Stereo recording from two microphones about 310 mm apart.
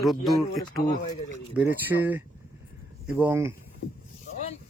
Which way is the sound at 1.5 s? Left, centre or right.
Centre.